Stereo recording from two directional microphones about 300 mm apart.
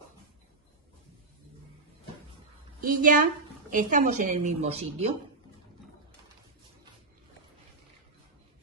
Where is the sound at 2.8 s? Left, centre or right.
Right.